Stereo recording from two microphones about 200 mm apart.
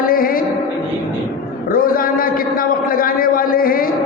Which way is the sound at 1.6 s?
45° left (ahead or behind).